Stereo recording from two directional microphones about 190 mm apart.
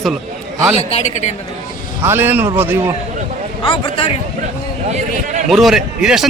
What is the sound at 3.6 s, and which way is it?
Speech, 30° left (ahead or behind).